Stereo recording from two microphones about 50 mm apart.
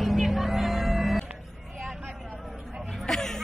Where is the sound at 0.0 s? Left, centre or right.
Centre.